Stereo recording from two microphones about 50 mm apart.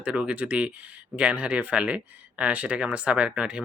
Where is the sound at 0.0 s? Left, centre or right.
Right.